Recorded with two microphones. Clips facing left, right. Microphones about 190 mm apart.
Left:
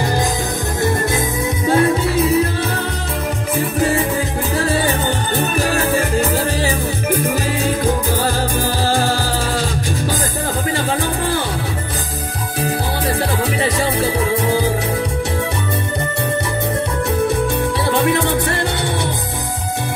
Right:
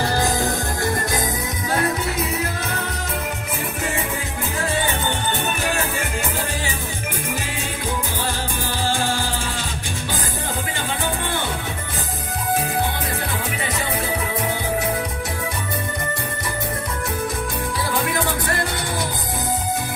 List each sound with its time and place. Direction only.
1.7 s music: 30° left (ahead or behind)
4.6 s music: 35° left (ahead or behind)